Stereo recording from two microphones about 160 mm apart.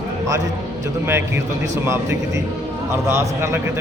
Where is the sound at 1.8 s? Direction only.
15° right (ahead or behind).